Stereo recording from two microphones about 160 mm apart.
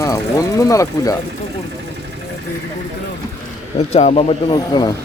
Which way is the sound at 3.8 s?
40° left (ahead or behind).